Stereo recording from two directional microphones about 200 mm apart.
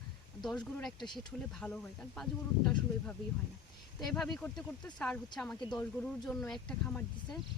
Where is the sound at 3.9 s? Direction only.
Centre (ahead or behind).